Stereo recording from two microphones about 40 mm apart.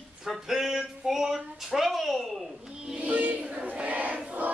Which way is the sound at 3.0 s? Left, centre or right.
Right.